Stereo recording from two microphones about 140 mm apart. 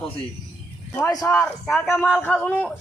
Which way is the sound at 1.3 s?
10° left (ahead or behind).